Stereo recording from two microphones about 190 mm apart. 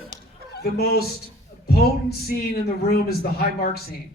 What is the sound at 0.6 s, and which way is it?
A man's voice, 55° left (ahead or behind).